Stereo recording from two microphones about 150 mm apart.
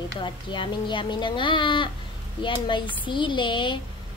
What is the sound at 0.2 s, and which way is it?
Child singing, 30° left (ahead or behind).